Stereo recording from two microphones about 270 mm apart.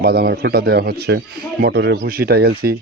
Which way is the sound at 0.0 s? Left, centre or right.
Right.